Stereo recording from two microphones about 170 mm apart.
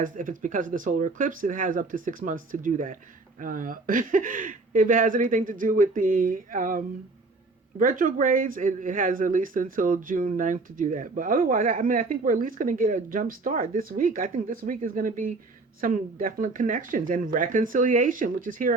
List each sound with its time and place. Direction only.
0.0 s speech: 50° right (ahead or behind)